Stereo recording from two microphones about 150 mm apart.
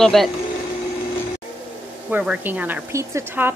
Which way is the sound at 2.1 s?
10° right (ahead or behind).